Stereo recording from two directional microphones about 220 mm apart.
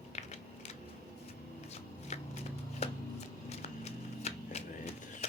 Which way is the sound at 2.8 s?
30° left (ahead or behind).